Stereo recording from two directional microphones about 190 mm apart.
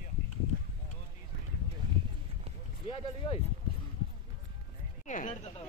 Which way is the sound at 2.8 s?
30° left (ahead or behind).